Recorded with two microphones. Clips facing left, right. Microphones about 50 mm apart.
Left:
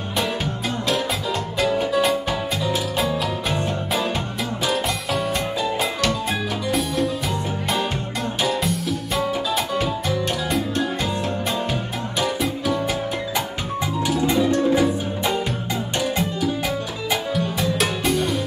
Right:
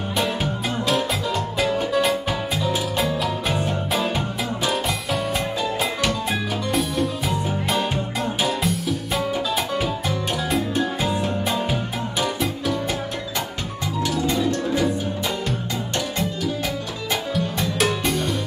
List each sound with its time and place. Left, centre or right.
0.8 s music: centre
14.0 s music: centre
17.1 s music: centre